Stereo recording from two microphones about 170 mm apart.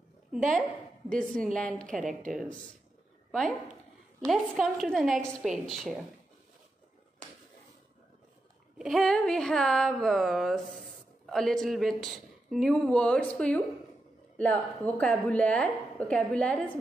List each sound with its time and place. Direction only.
0.5 s a woman's voice: centre (ahead or behind)
8.7 s a woman's voice: centre (ahead or behind)